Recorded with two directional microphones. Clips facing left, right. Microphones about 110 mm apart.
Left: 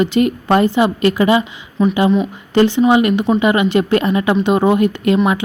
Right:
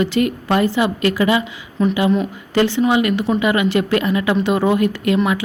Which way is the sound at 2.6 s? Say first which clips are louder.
Left 4 dB; 25° left (ahead or behind).